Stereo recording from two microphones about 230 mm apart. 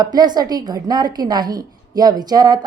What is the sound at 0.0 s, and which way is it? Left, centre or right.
Speech, centre.